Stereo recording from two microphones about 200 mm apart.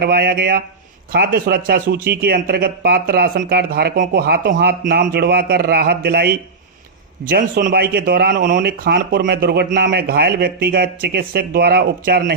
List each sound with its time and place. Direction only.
0.0 s speech: 50° right (ahead or behind)